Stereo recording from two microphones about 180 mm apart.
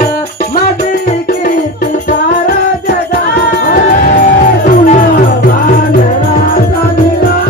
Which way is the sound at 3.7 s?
50° left (ahead or behind).